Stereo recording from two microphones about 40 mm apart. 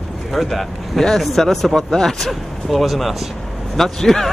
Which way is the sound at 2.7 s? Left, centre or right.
Centre.